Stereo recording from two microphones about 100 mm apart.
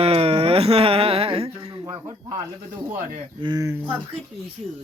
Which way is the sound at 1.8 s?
30° right (ahead or behind).